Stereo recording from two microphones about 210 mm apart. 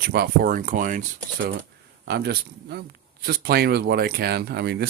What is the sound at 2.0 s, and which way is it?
Speech, 50° right (ahead or behind).